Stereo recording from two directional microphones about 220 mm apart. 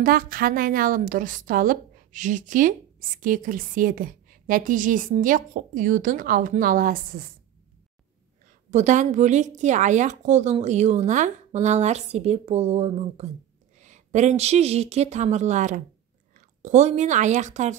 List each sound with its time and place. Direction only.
0.0 s a woman's voice: 40° right (ahead or behind)
8.6 s a woman's voice: 35° right (ahead or behind)